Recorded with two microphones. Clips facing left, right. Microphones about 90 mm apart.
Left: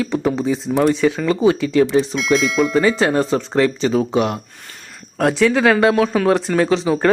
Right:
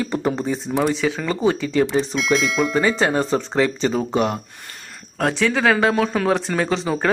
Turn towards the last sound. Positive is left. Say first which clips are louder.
# left 5 dB
turn(degrees=0)  # may be behind; listen again after turning